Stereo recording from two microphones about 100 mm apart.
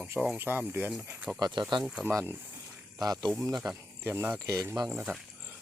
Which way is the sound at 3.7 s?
20° right (ahead or behind).